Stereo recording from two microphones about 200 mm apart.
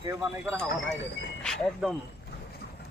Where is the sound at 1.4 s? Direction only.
5° left (ahead or behind).